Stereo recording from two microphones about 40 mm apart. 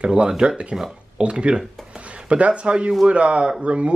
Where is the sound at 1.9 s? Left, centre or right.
Right.